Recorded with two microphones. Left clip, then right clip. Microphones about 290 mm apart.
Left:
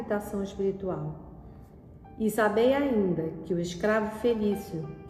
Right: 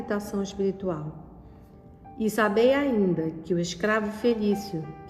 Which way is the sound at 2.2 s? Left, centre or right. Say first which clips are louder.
Right 2 dB; right.